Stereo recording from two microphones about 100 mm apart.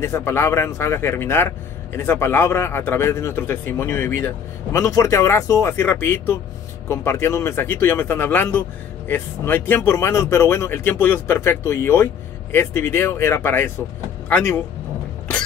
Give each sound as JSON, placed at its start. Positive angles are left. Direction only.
{"t": 0.0, "sound": "speech", "side_deg": 25}